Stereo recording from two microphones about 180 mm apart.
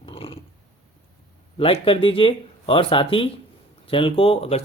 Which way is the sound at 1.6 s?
30° left (ahead or behind).